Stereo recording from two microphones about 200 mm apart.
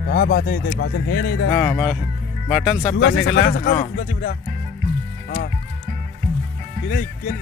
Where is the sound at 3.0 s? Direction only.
60° left (ahead or behind).